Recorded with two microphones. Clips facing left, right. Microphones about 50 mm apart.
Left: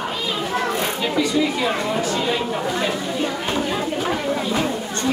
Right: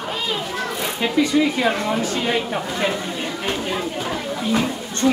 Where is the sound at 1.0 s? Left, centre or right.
Right.